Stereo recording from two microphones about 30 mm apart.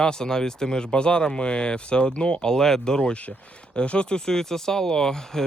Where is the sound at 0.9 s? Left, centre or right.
Left.